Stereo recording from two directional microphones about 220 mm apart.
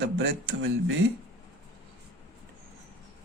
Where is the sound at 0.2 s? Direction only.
60° right (ahead or behind).